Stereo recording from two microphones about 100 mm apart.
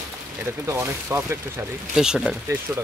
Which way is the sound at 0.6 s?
25° right (ahead or behind).